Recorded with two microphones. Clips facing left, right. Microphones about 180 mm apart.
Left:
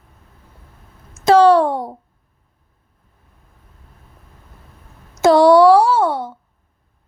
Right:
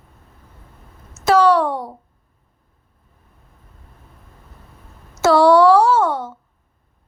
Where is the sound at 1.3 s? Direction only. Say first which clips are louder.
Left 3 dB; 25° left (ahead or behind).